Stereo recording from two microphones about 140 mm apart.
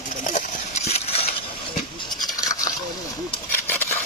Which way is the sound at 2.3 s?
25° left (ahead or behind).